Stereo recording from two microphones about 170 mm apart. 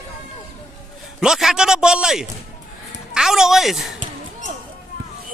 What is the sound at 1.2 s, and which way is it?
A man's voice, 5° right (ahead or behind).